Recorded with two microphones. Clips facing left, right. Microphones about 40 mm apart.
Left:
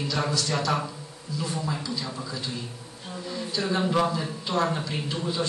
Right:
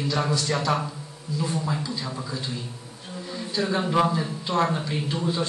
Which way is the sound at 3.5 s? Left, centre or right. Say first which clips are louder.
Right 2 dB; right.